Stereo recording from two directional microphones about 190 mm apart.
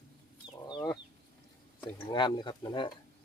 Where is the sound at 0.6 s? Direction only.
20° left (ahead or behind).